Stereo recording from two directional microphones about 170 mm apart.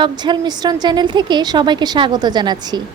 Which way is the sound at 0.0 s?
25° right (ahead or behind).